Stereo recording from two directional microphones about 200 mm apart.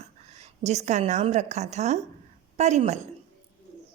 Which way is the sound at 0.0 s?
35° right (ahead or behind).